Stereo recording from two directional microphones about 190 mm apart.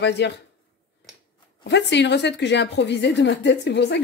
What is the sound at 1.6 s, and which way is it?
A woman's voice, 65° left (ahead or behind).